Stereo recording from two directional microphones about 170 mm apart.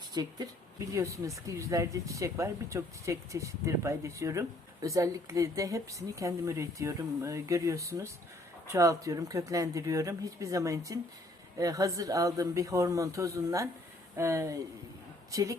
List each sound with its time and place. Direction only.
0.1 s speech: 25° right (ahead or behind)